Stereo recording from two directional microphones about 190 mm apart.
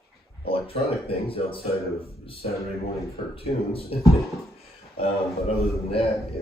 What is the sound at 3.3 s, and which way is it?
Speech, 30° left (ahead or behind).